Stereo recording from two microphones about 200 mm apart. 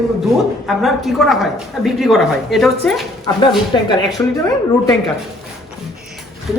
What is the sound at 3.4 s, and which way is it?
Speech, 25° left (ahead or behind).